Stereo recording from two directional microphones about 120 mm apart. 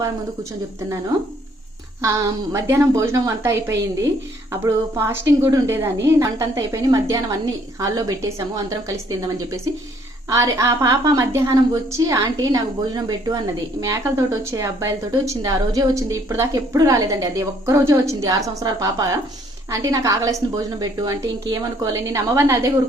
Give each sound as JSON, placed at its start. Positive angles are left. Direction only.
{"t": 2.0, "sound": "a woman's voice", "side_deg": -25}
{"t": 10.2, "sound": "a woman's voice", "side_deg": -25}